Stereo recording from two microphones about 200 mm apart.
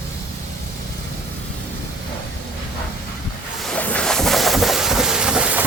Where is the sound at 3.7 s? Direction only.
5° left (ahead or behind).